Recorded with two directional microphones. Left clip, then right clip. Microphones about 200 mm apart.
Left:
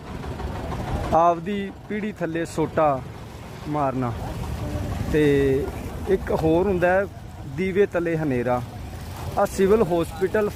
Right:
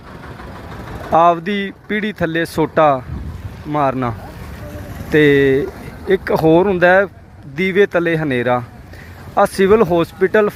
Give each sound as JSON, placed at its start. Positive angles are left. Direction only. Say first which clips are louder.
{"t": 1.1, "sound": "speech", "louder": "right 7 dB", "side_deg": -10}
{"t": 5.1, "sound": "speech", "louder": "right 8 dB", "side_deg": -15}